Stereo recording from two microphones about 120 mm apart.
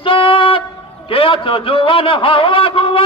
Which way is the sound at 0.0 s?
50° left (ahead or behind).